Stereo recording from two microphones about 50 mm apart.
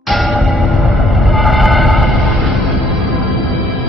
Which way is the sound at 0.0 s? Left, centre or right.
Centre.